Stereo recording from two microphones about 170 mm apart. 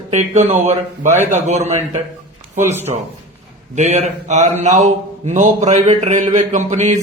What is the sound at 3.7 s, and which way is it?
A man's voice, 45° right (ahead or behind).